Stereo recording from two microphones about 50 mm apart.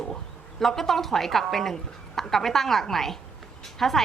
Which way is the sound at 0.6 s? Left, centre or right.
Centre.